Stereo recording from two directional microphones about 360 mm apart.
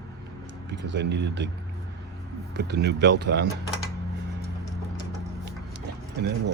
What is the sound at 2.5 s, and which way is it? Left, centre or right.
Speech, right.